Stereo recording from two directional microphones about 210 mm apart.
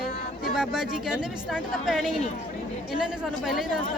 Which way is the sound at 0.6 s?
5° right (ahead or behind).